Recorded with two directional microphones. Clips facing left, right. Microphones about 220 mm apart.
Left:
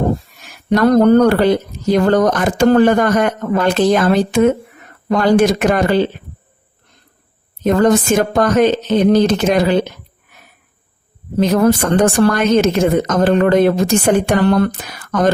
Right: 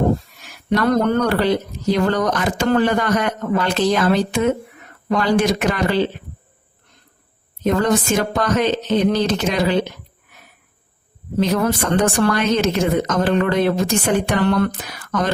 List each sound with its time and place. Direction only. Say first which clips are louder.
0.7 s a woman's voice: left 7 dB; 40° left (ahead or behind)
7.6 s a woman's voice: left 5 dB; 50° left (ahead or behind)
11.3 s a woman's voice: left 6 dB; 45° left (ahead or behind)